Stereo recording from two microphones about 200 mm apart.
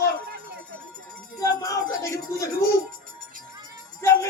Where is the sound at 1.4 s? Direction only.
15° left (ahead or behind).